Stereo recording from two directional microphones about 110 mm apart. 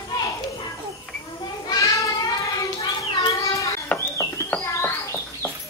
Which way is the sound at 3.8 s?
20° left (ahead or behind).